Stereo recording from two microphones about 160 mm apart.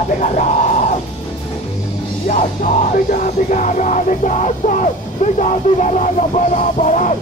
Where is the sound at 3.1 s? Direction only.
50° left (ahead or behind).